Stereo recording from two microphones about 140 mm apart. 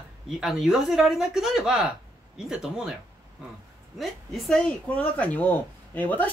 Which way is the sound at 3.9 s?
Centre (ahead or behind).